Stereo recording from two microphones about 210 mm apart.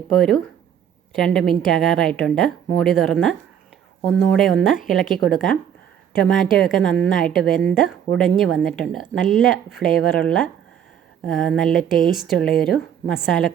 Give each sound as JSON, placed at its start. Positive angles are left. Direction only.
{"t": 0.1, "sound": "a woman's voice", "side_deg": 0}
{"t": 9.8, "sound": "speech", "side_deg": 45}
{"t": 10.2, "sound": "a woman's voice", "side_deg": 5}
{"t": 11.7, "sound": "speech", "side_deg": 40}
{"t": 12.3, "sound": "a woman's voice", "side_deg": 0}